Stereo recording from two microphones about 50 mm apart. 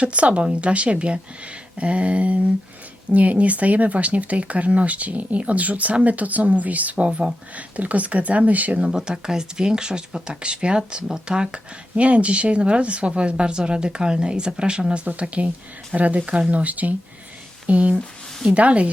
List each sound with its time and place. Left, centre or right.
0.0 s speech: right
8.9 s speech: centre